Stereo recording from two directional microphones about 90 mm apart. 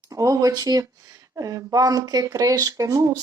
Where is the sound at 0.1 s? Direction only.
40° right (ahead or behind).